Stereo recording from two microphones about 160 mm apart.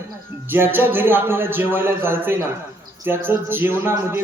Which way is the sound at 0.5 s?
15° right (ahead or behind).